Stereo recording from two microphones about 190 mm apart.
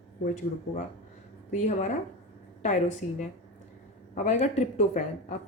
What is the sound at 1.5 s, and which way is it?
A woman's voice, 40° left (ahead or behind).